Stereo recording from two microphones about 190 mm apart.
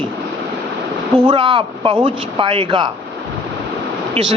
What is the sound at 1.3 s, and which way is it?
Speech, 30° right (ahead or behind).